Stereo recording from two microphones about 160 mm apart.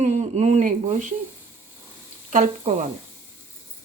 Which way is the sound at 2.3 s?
50° right (ahead or behind).